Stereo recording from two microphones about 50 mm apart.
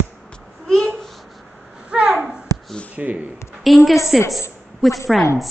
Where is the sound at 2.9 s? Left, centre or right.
Right.